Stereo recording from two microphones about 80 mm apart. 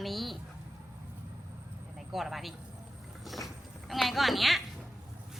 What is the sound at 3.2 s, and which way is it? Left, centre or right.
Vehicle, centre.